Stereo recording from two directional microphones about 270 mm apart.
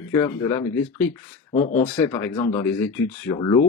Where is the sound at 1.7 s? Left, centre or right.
Centre.